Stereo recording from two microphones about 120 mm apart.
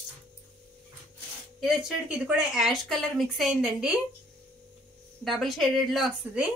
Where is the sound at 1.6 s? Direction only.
5° right (ahead or behind).